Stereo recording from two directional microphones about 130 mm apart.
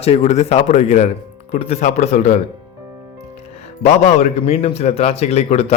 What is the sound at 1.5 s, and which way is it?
Speech, 50° left (ahead or behind).